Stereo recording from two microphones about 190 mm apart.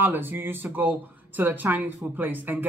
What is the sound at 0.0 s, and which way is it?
Speech, 10° right (ahead or behind).